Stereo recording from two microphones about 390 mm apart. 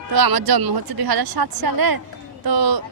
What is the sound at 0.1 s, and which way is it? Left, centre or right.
Speech, right.